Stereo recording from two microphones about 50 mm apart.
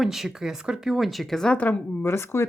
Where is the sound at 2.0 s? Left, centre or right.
Left.